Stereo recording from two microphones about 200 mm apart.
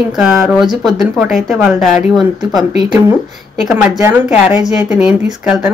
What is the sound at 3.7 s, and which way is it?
A woman's voice, 10° right (ahead or behind).